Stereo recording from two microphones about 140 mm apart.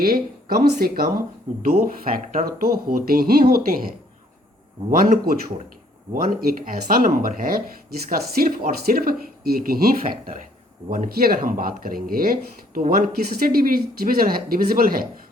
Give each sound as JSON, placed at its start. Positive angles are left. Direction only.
{"t": 0.0, "sound": "speech", "side_deg": -90}
{"t": 4.9, "sound": "speech", "side_deg": -75}
{"t": 12.8, "sound": "speech", "side_deg": -75}